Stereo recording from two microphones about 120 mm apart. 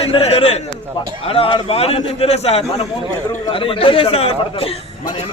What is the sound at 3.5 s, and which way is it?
A man's voice, 50° left (ahead or behind).